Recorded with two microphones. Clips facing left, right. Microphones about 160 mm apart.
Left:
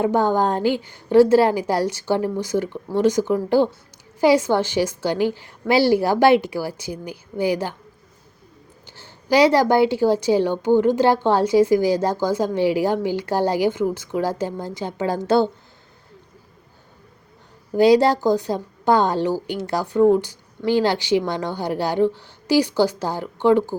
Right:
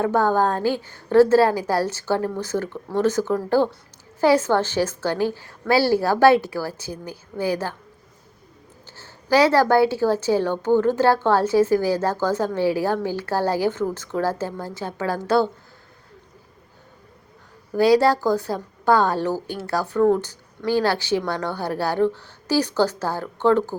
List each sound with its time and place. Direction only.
0.0 s a woman's voice: 15° left (ahead or behind)
8.9 s a woman's voice: 15° left (ahead or behind)
17.7 s a woman's voice: 20° left (ahead or behind)